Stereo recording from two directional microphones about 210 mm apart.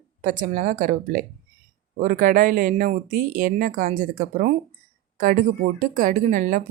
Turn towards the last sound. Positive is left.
turn(degrees=-35)  # may be behind; listen again after turning